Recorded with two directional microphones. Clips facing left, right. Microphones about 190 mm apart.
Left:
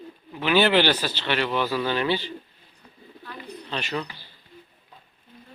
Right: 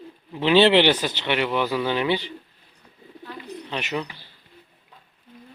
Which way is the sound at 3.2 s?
20° right (ahead or behind).